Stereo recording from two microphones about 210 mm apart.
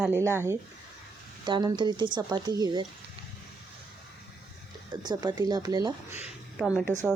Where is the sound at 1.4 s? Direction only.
20° right (ahead or behind).